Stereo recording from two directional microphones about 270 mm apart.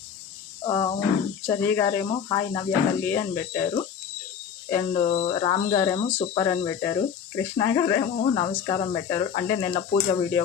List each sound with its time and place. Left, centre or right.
0.6 s speech: centre
5.0 s speech: left